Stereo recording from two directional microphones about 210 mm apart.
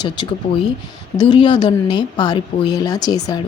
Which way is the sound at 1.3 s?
20° left (ahead or behind).